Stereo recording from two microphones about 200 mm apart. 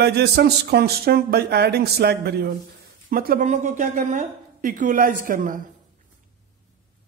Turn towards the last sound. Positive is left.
turn(degrees=-40)  # may be behind; listen again after turning